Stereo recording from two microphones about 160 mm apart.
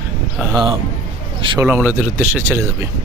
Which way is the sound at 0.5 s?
30° right (ahead or behind).